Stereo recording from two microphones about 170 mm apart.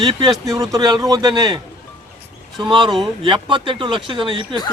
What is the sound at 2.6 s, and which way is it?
Speech, 25° right (ahead or behind).